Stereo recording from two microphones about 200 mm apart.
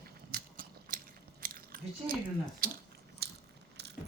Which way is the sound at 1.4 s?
45° right (ahead or behind).